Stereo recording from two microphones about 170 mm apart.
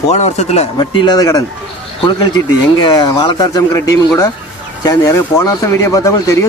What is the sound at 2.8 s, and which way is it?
Speech, 25° left (ahead or behind).